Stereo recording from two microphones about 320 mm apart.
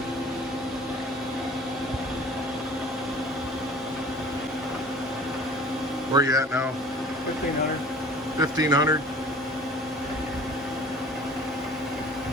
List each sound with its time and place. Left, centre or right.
6.1 s speech: centre
8.4 s speech: centre